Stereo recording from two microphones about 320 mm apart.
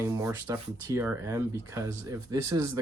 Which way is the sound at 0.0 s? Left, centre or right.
Centre.